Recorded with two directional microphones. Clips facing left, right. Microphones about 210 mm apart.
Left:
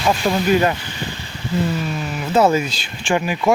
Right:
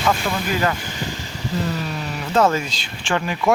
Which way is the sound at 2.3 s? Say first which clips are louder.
Left 3 dB; 10° left (ahead or behind).